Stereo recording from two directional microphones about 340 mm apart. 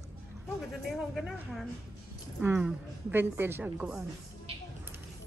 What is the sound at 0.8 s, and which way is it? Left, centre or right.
A woman's voice, centre.